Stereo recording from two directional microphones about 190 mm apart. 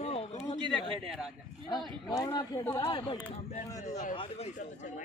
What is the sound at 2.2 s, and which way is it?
Speech, 20° left (ahead or behind).